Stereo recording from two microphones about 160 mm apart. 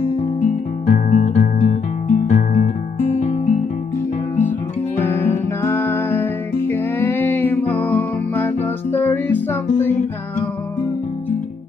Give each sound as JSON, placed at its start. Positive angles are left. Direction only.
{"t": 0.4, "sound": "guitar", "side_deg": 50}
{"t": 4.4, "sound": "music", "side_deg": 10}